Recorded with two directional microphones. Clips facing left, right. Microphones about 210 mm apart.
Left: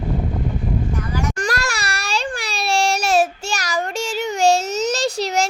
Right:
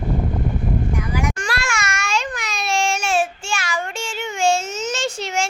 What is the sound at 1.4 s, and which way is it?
Baby cry, 40° left (ahead or behind).